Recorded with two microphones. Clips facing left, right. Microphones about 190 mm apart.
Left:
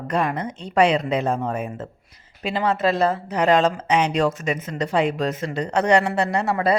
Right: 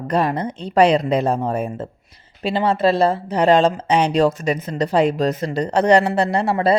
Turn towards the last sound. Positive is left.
turn(degrees=-30)  # may be behind; listen again after turning